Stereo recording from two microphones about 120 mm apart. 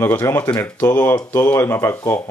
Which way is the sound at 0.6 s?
15° left (ahead or behind).